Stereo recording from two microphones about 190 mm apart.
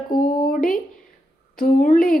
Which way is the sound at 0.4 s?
50° left (ahead or behind).